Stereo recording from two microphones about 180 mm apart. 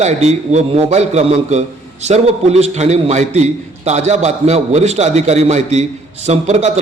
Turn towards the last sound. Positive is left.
turn(degrees=-35)  # may be behind; listen again after turning